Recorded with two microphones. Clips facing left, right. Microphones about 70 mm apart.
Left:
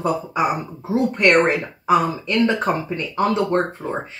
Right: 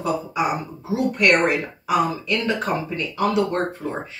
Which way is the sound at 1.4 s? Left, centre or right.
Left.